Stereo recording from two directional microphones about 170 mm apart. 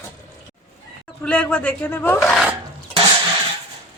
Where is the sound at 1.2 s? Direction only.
5° left (ahead or behind).